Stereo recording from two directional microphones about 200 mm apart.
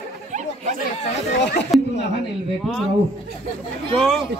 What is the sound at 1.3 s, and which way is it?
Speech, 60° left (ahead or behind).